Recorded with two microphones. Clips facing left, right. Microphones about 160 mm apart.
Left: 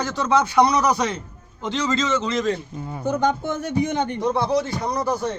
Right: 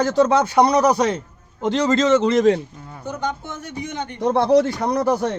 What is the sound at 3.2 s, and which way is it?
Speech, 90° left.